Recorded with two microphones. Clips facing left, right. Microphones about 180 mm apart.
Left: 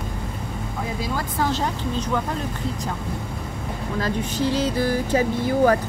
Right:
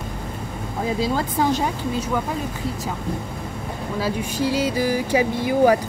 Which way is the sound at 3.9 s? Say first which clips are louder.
Even; 10° right (ahead or behind).